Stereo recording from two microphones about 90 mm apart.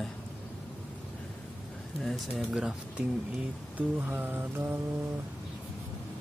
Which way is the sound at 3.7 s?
20° right (ahead or behind).